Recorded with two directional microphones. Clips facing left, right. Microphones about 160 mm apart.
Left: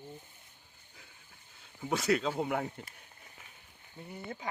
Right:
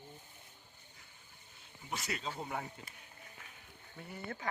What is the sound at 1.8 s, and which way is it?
Speech, 85° left.